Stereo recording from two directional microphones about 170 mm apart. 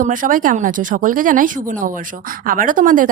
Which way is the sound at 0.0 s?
50° right (ahead or behind).